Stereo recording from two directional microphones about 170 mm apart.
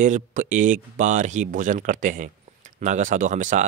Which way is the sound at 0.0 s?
50° right (ahead or behind).